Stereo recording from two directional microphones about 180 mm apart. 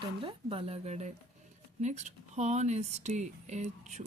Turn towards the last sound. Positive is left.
turn(degrees=-40)  # may be behind; listen again after turning